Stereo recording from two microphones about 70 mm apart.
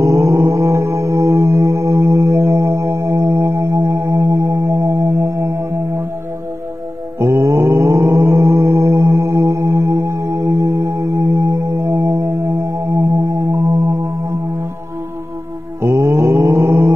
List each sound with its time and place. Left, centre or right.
0.0 s music: right
7.2 s mantra: right
15.8 s mantra: right